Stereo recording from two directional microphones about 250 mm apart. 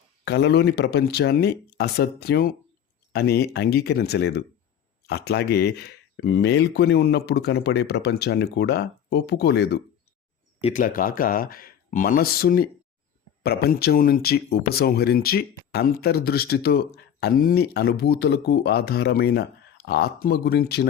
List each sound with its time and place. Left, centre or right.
0.3 s speech: left
10.6 s speech: left